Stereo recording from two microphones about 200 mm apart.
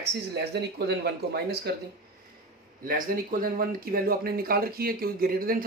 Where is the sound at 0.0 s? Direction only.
60° right (ahead or behind).